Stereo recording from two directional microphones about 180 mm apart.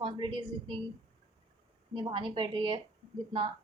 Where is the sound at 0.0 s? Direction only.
25° right (ahead or behind).